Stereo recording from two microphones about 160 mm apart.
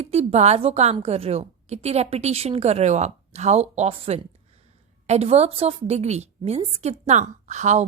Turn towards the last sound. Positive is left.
turn(degrees=-45)  # may be behind; listen again after turning